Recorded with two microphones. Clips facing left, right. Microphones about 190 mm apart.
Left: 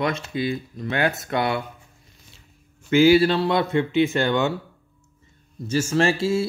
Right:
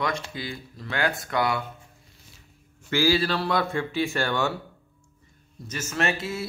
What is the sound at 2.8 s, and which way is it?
Speech, 20° left (ahead or behind).